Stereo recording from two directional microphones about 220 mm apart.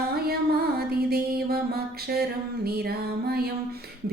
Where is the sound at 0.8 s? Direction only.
45° right (ahead or behind).